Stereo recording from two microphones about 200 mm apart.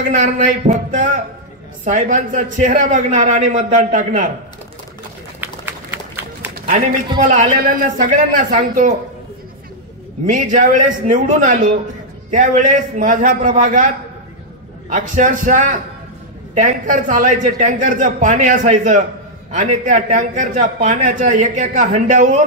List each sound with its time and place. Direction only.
0.2 s a man's voice: 40° right (ahead or behind)
5.4 s run: 10° right (ahead or behind)
7.2 s a man's voice: 40° right (ahead or behind)
10.2 s a man's voice: 40° right (ahead or behind)